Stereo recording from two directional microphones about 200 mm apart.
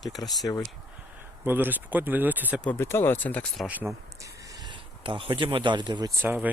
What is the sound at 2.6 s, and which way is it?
Speech, 10° left (ahead or behind).